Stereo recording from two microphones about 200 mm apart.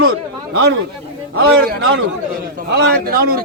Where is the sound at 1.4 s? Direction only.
50° right (ahead or behind).